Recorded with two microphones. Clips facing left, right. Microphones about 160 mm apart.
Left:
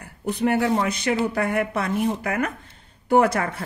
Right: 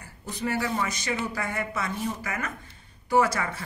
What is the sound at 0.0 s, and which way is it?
A woman's voice, 60° left (ahead or behind).